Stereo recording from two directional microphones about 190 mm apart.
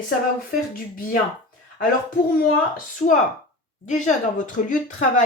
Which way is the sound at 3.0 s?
35° left (ahead or behind).